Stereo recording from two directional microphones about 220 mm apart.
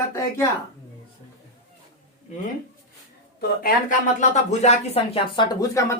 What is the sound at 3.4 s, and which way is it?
Speech, 45° left (ahead or behind).